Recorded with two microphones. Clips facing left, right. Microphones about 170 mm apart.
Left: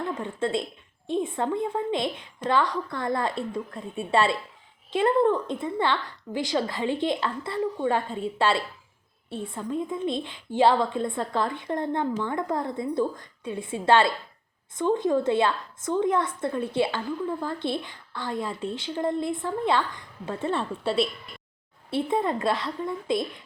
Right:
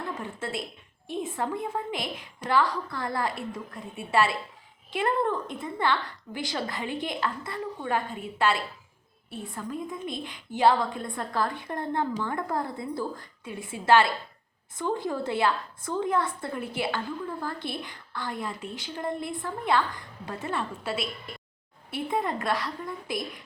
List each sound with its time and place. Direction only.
0.2 s a woman's voice: 25° left (ahead or behind)